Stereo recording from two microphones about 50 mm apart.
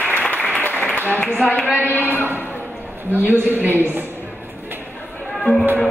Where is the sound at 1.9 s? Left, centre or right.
Left.